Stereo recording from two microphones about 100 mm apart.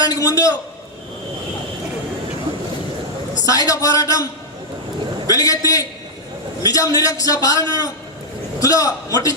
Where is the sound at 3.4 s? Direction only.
35° left (ahead or behind).